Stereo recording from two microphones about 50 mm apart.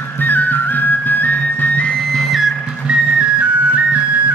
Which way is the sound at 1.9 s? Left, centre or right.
Centre.